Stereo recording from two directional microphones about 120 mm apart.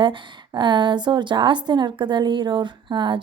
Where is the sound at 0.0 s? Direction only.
40° right (ahead or behind).